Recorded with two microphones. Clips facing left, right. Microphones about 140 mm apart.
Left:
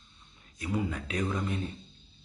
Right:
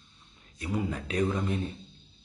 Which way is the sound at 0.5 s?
40° right (ahead or behind).